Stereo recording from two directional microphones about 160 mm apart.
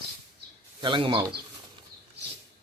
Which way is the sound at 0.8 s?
30° right (ahead or behind).